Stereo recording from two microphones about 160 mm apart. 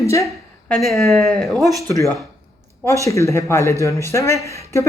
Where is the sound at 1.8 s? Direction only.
20° left (ahead or behind).